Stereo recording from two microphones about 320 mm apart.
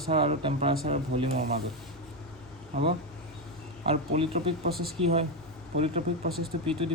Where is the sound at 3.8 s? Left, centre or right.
Centre.